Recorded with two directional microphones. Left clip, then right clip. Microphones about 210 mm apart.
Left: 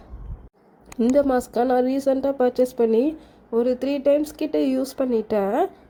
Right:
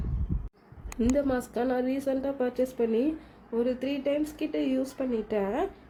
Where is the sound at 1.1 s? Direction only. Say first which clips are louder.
Left 10 dB; 35° left (ahead or behind).